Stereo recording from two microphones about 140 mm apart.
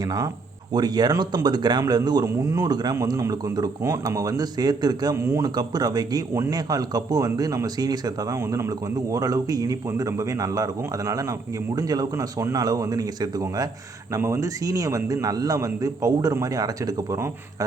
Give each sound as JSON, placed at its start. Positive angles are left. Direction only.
{"t": 0.0, "sound": "speech", "side_deg": -30}